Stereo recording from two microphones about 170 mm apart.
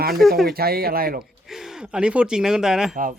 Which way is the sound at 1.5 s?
Centre (ahead or behind).